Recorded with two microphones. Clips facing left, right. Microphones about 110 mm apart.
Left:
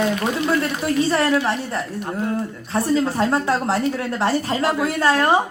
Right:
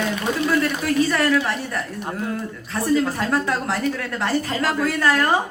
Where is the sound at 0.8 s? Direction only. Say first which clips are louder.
Left 1 dB; 30° left (ahead or behind).